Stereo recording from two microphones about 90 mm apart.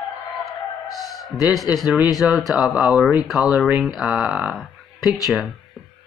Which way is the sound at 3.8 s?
5° right (ahead or behind).